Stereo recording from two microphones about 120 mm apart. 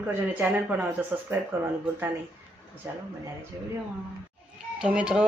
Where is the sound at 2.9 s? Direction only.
15° right (ahead or behind).